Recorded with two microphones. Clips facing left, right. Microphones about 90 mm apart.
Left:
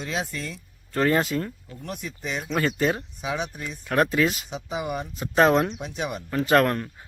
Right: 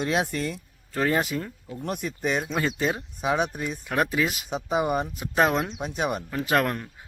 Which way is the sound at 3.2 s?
50° right (ahead or behind).